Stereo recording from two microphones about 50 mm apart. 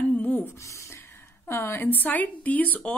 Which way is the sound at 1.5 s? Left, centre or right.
Left.